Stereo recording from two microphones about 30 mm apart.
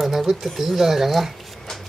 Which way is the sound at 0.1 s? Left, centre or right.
Centre.